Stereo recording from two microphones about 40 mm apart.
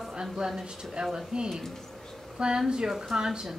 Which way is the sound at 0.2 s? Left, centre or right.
Centre.